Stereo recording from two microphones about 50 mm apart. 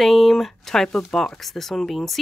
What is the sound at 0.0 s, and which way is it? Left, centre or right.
Speech, centre.